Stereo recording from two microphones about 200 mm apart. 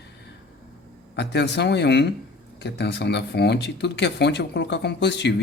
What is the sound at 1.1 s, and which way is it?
Speech, 60° left (ahead or behind).